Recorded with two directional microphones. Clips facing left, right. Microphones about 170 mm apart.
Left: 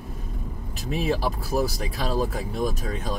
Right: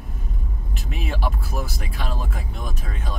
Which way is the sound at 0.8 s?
40° left (ahead or behind).